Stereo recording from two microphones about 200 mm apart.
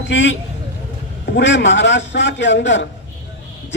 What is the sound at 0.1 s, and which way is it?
Speech, 65° left (ahead or behind).